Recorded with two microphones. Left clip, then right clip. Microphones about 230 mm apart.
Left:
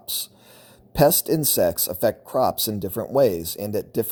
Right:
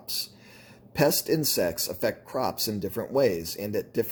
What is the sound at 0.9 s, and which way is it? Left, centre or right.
Speech, left.